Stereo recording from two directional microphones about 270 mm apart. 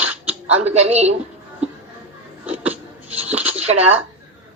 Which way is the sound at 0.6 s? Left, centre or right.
Right.